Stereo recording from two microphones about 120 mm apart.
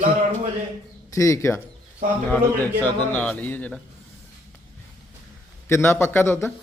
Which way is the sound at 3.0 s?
10° left (ahead or behind).